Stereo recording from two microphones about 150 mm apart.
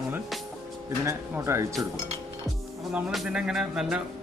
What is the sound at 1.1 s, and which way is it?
Speech, 20° right (ahead or behind).